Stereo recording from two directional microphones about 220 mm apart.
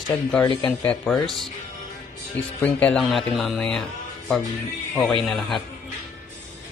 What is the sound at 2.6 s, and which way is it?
A man's voice, 5° left (ahead or behind).